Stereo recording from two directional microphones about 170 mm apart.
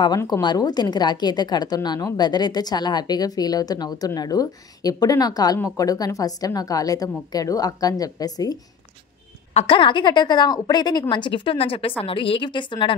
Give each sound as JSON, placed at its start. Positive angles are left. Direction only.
{"t": 0.0, "sound": "a woman's voice", "side_deg": 25}
{"t": 9.5, "sound": "a woman's voice", "side_deg": 35}